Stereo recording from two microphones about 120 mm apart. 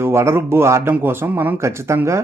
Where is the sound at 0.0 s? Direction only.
20° right (ahead or behind).